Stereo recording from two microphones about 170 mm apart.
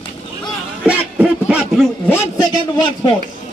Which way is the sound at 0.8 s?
5° right (ahead or behind).